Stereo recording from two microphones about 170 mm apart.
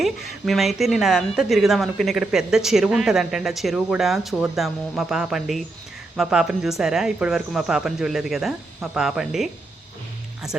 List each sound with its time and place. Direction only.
0.0 s a woman's voice: centre (ahead or behind)